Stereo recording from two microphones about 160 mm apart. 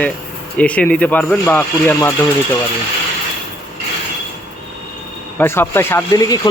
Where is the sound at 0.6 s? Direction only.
10° left (ahead or behind).